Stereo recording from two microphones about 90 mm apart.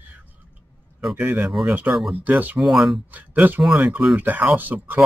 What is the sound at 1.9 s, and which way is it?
Speech, centre (ahead or behind).